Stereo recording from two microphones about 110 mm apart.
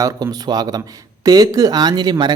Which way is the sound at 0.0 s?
35° right (ahead or behind).